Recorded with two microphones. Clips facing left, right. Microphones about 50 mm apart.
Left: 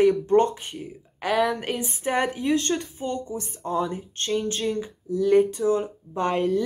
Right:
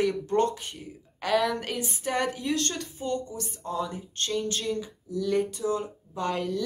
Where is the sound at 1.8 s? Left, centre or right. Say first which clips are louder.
Left 4 dB; left.